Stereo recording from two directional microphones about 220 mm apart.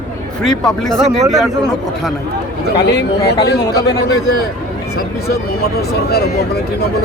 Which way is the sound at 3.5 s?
50° left (ahead or behind).